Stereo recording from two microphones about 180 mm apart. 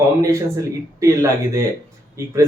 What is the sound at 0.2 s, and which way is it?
Speech, 20° right (ahead or behind).